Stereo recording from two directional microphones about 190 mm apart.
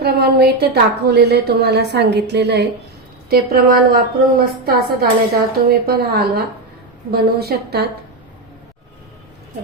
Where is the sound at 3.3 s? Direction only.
50° right (ahead or behind).